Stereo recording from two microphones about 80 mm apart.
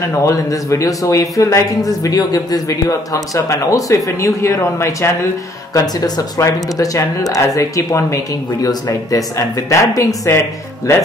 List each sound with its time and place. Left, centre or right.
0.2 s speech: left
3.3 s speech: left
5.8 s speech: left